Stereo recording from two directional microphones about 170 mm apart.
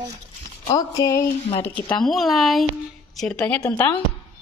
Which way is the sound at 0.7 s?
20° left (ahead or behind).